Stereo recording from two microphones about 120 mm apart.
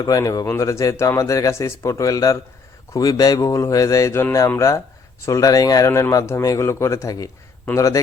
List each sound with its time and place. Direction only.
0.0 s speech: 30° left (ahead or behind)